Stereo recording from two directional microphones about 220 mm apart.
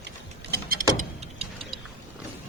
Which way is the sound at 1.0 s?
30° right (ahead or behind).